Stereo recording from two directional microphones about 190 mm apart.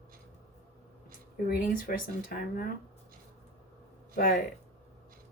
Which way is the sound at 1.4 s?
50° left (ahead or behind).